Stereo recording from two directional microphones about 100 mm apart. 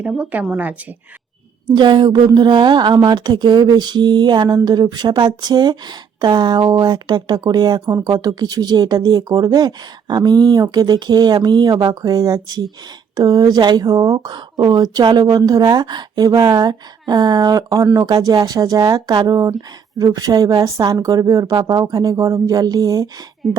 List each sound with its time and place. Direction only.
0.1 s a woman's voice: 15° right (ahead or behind)
1.7 s a woman's voice: 50° right (ahead or behind)
23.4 s speech: 5° right (ahead or behind)